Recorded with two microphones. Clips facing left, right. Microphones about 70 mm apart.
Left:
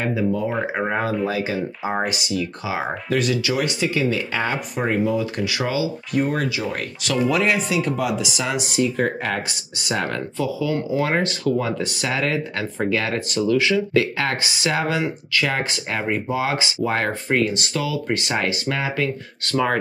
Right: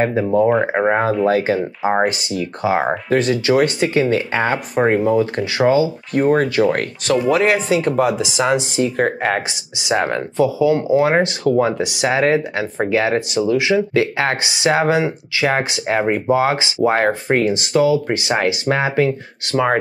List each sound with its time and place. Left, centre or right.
0.0 s speech: right
1.2 s speech: right
7.1 s speech: right
8.8 s speech: right
9.9 s speech: right
11.8 s speech: centre
12.1 s speech: right
15.9 s speech: right